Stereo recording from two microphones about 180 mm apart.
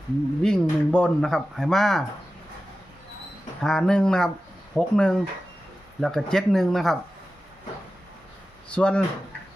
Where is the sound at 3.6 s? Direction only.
5° left (ahead or behind).